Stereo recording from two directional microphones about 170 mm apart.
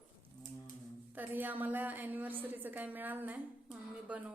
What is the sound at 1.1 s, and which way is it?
A woman's voice, 10° right (ahead or behind).